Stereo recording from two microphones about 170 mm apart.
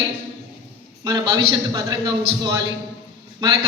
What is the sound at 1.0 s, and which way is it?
Speech, 25° right (ahead or behind).